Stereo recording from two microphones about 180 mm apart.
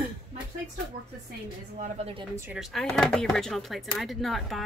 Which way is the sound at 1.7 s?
35° right (ahead or behind).